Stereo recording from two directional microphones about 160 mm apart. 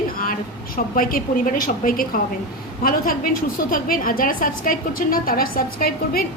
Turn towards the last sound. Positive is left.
turn(degrees=65)  # may be behind; listen again after turning